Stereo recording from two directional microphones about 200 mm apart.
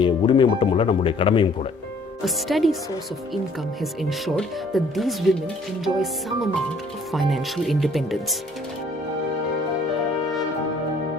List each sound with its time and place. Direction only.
0.0 s speech: 25° left (ahead or behind)
2.2 s speech: centre (ahead or behind)
4.4 s speech: centre (ahead or behind)